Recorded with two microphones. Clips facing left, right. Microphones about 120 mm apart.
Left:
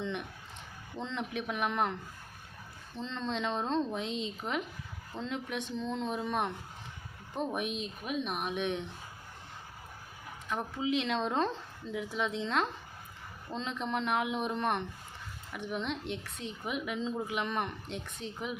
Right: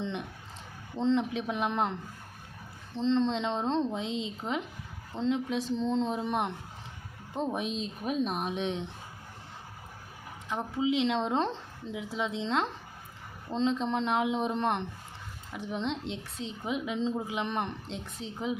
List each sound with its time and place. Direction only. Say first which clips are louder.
0.0 s a woman's voice: right 1 dB; 30° right (ahead or behind)
10.5 s a woman's voice: right 3 dB; 20° right (ahead or behind)